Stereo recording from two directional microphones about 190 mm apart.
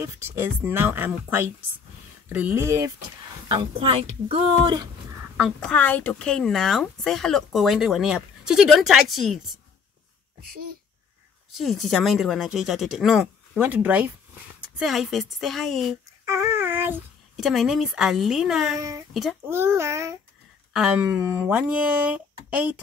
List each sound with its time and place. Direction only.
0.0 s speech: 15° right (ahead or behind)
3.4 s a woman's voice: 30° right (ahead or behind)
5.4 s speech: 5° left (ahead or behind)
11.5 s speech: centre (ahead or behind)
16.3 s speech: 15° right (ahead or behind)
18.8 s speech: 15° right (ahead or behind)